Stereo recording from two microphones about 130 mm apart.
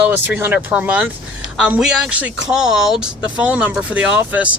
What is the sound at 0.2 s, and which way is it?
Speech, 15° right (ahead or behind).